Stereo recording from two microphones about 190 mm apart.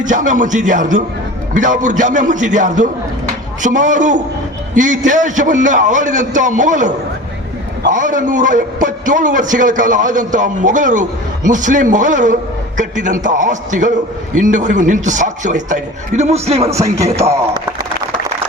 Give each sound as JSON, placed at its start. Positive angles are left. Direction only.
{"t": 0.0, "sound": "a man's voice", "side_deg": -40}
{"t": 16.7, "sound": "music", "side_deg": -15}